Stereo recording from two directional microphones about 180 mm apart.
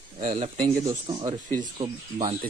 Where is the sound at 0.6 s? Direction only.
20° right (ahead or behind).